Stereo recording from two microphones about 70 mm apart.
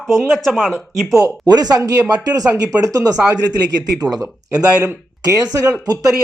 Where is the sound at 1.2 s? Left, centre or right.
Right.